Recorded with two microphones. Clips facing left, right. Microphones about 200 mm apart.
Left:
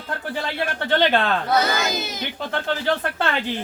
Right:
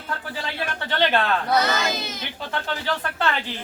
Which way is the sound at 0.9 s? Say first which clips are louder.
Left 3 dB; 50° left (ahead or behind).